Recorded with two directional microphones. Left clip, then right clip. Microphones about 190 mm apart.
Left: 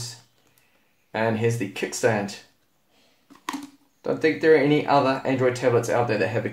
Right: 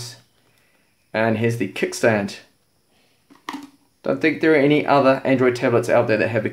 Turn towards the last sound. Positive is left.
turn(degrees=-35)  # may be behind; listen again after turning